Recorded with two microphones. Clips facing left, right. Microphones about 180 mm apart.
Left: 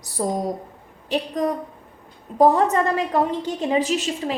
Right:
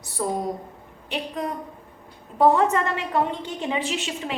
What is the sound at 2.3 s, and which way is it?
A woman's voice, 35° left (ahead or behind).